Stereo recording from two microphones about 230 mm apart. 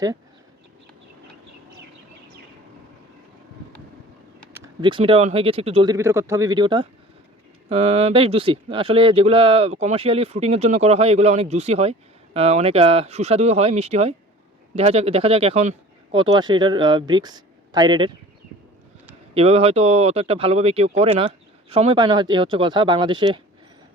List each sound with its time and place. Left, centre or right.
4.5 s speech: centre
19.3 s speech: right